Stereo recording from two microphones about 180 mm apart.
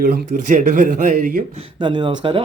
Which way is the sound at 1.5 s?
25° right (ahead or behind).